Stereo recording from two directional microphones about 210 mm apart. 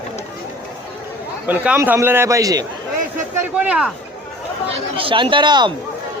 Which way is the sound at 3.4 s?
5° right (ahead or behind).